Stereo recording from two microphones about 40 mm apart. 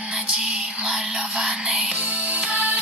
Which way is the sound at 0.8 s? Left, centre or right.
Centre.